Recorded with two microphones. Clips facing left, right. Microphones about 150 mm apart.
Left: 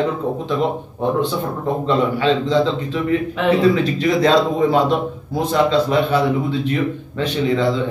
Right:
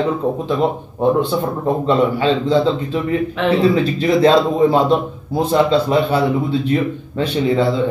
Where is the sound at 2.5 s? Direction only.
35° right (ahead or behind).